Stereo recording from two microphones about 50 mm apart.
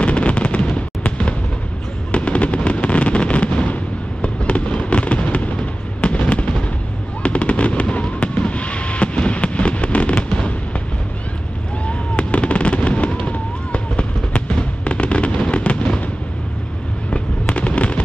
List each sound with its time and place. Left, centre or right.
0.0 s fireworks: left
11.8 s fireworks: left
17.5 s fireworks: left